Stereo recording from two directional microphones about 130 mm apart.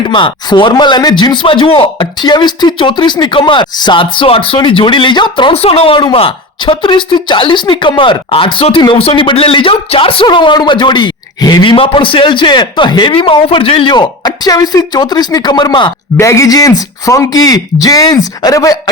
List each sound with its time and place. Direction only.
0.1 s a man's voice: 40° left (ahead or behind)
16.1 s speech: 25° left (ahead or behind)